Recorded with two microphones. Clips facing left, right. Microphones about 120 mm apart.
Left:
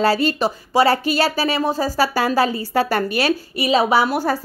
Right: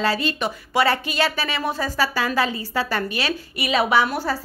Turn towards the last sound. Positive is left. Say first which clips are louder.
# left 3 dB
turn(degrees=35)  # may be behind; listen again after turning